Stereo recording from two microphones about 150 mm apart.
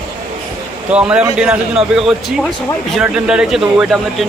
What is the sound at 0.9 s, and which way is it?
A man's voice, 10° right (ahead or behind).